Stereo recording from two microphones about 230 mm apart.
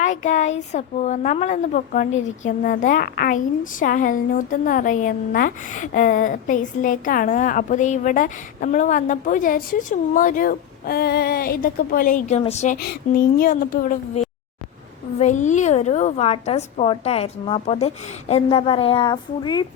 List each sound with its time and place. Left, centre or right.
0.0 s a woman's voice: left
12.8 s a woman's voice: left; by 19.6 s centre